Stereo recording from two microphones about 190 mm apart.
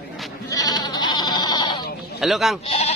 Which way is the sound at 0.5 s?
20° left (ahead or behind).